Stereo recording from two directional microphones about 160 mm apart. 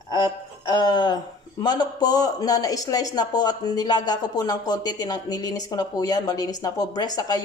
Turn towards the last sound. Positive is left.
turn(degrees=25)  # may be behind; listen again after turning